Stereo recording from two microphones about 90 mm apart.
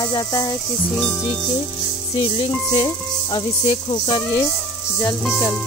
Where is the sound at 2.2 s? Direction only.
75° left (ahead or behind).